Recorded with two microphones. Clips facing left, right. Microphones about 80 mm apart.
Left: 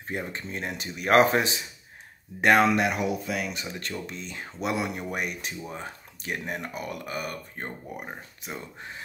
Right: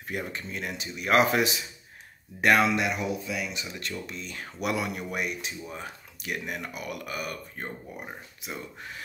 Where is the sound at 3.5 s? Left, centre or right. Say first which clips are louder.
Left 1 dB; left.